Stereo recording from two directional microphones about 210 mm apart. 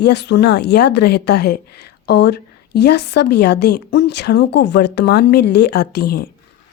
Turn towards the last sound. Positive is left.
turn(degrees=50)  # may be behind; listen again after turning